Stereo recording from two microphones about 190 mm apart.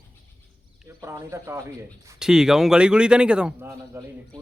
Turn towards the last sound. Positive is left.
turn(degrees=-15)  # may be behind; listen again after turning